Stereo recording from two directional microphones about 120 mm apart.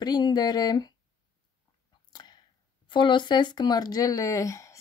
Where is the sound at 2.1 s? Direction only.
35° left (ahead or behind).